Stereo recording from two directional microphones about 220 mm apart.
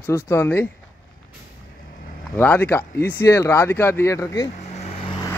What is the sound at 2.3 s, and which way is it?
Speech, 10° left (ahead or behind).